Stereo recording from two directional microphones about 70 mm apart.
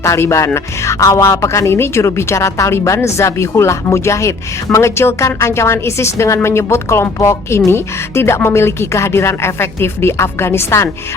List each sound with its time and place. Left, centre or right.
0.0 s speech: left